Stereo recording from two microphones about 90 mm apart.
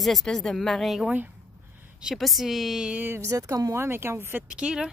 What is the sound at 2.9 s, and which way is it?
Speech, 25° right (ahead or behind).